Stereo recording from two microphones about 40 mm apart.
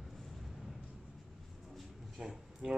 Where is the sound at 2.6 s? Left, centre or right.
Centre.